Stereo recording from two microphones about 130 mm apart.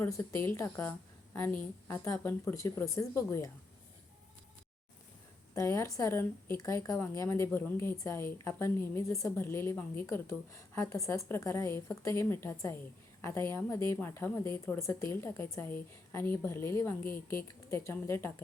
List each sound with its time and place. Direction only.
0.0 s a woman's voice: 20° left (ahead or behind)
5.5 s a woman's voice: 20° left (ahead or behind)